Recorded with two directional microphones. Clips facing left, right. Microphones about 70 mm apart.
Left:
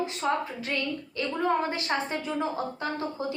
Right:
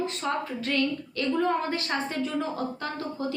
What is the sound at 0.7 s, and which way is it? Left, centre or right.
Speech, centre.